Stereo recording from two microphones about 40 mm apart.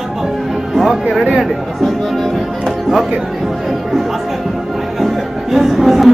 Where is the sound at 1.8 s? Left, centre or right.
Centre.